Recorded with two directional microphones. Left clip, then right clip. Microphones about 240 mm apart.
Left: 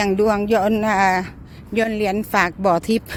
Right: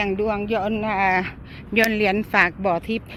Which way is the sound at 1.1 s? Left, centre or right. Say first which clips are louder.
Even; centre.